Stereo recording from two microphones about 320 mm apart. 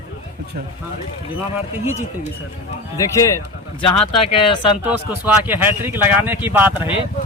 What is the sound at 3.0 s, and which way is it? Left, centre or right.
Speech, centre.